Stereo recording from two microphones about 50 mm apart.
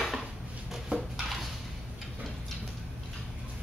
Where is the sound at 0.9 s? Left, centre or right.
Right.